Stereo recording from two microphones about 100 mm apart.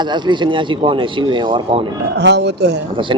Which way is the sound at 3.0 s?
55° right (ahead or behind).